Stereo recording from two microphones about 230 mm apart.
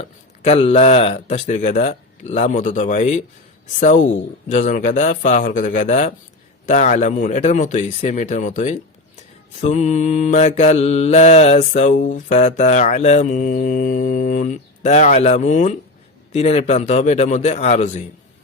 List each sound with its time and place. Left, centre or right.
0.0 s speech: left
3.8 s mantra: left
16.3 s speech: left